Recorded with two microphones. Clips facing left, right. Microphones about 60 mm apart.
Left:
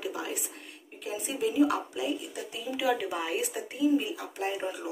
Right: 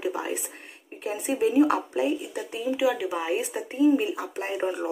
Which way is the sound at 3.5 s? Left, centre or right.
Right.